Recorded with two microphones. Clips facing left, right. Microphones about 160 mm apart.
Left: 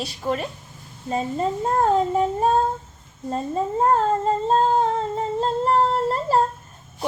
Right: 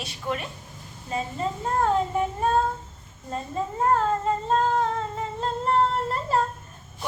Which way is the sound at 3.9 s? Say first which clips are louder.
Left 3 dB; 30° left (ahead or behind).